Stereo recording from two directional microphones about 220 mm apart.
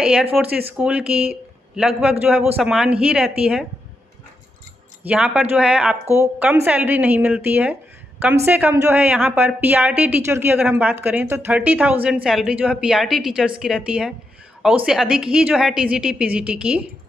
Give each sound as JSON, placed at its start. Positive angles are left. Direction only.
{"t": 0.0, "sound": "speech", "side_deg": -5}
{"t": 5.0, "sound": "a woman's voice", "side_deg": -5}